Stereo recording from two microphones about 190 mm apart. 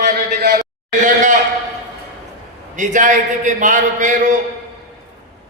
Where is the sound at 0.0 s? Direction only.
55° right (ahead or behind).